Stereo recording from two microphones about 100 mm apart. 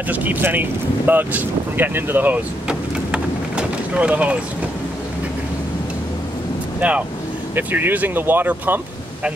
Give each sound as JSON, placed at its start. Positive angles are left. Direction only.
{"t": 0.1, "sound": "speech", "side_deg": -15}
{"t": 6.8, "sound": "speech", "side_deg": -10}